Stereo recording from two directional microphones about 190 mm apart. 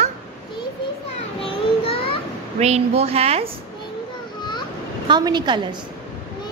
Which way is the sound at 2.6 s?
35° right (ahead or behind).